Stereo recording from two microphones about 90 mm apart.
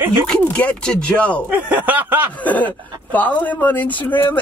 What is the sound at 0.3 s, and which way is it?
Speech, 15° left (ahead or behind).